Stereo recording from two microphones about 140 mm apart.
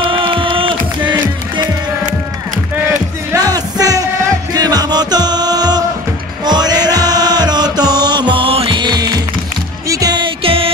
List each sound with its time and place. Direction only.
0.0 s music: 40° right (ahead or behind)
3.3 s music: 25° right (ahead or behind)
6.4 s chant: 30° right (ahead or behind)
9.8 s music: 25° right (ahead or behind); by 10.7 s 40° right (ahead or behind)